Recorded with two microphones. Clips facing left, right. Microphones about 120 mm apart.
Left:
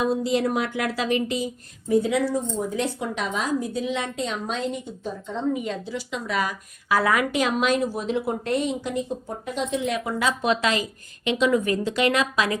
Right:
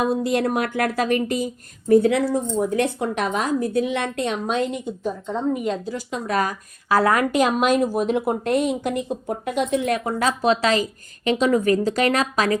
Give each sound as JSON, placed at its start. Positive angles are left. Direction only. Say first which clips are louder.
{"t": 0.0, "sound": "speech", "louder": "right 2 dB", "side_deg": -55}
{"t": 1.9, "sound": "a woman's voice", "louder": "right 5 dB", "side_deg": -65}